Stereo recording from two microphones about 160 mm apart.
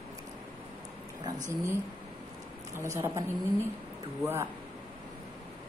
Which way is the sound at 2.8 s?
15° right (ahead or behind).